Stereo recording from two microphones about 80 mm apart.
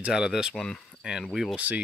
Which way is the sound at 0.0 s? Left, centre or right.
Centre.